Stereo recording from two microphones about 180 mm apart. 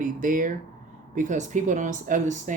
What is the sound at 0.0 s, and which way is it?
Speech, 45° right (ahead or behind).